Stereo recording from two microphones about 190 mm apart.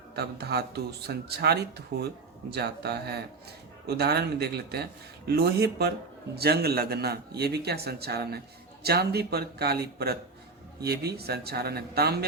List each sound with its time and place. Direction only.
0.2 s a man's voice: 60° right (ahead or behind)